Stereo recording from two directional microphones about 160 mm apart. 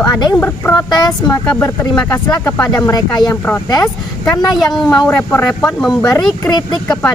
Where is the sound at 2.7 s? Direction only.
25° left (ahead or behind).